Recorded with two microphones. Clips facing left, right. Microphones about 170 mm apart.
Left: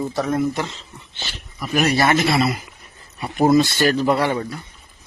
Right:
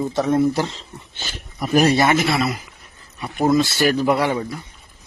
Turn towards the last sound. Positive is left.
turn(degrees=-10)  # may be behind; listen again after turning